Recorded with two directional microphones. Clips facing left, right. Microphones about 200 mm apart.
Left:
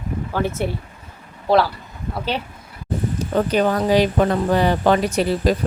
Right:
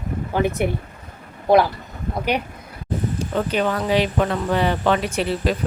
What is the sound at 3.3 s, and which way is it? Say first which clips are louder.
Speech: left 4 dB; 40° left (ahead or behind).